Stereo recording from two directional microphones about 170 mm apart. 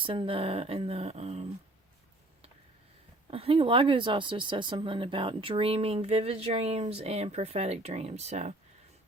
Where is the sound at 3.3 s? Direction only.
35° right (ahead or behind).